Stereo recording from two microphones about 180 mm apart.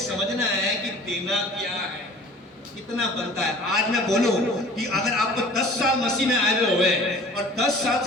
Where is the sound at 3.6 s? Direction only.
Centre (ahead or behind).